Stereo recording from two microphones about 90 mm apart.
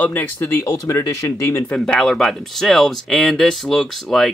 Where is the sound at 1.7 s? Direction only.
10° left (ahead or behind).